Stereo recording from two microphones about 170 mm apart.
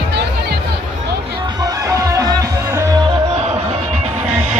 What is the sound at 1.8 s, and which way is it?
Music, 20° right (ahead or behind).